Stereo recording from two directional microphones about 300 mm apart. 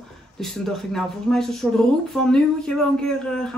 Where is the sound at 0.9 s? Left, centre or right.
Centre.